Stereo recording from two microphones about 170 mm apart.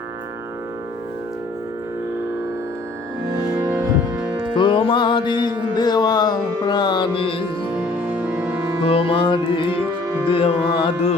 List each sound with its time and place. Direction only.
4.5 s music: 30° left (ahead or behind)
7.8 s music: 10° right (ahead or behind)
8.8 s music: 35° left (ahead or behind)